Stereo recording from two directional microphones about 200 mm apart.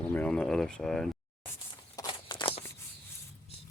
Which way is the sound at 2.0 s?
20° left (ahead or behind).